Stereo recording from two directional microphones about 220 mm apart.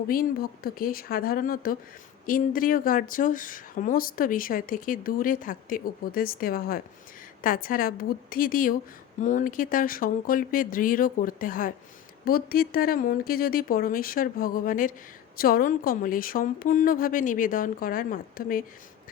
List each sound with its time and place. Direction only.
0.1 s speech: 40° left (ahead or behind)